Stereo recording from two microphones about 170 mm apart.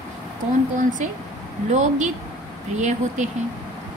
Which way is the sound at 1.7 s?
45° right (ahead or behind).